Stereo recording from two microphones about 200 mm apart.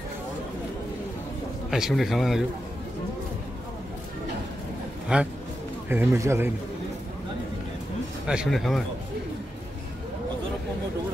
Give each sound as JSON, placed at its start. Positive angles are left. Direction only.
{"t": 1.7, "sound": "a man's voice", "side_deg": 0}
{"t": 5.1, "sound": "a man's voice", "side_deg": -5}
{"t": 8.3, "sound": "a man's voice", "side_deg": 0}